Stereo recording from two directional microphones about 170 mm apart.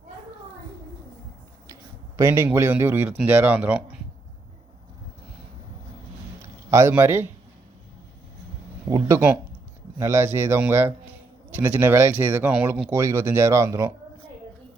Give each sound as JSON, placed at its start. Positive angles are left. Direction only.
{"t": 1.6, "sound": "speech", "side_deg": -20}
{"t": 6.4, "sound": "a sound", "side_deg": -15}
{"t": 8.9, "sound": "speech", "side_deg": -15}